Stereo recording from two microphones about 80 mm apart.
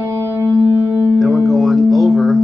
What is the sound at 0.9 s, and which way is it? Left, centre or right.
Music, right.